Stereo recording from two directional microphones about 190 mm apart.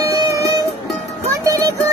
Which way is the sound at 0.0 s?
15° right (ahead or behind).